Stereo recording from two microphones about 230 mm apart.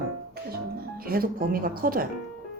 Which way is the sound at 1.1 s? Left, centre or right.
Right.